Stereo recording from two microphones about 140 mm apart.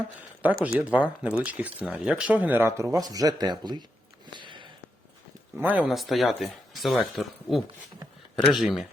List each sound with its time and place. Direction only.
0.4 s speech: 10° right (ahead or behind); by 3.8 s 30° right (ahead or behind)
4.4 s a sound: 35° right (ahead or behind)
5.5 s speech: 10° right (ahead or behind)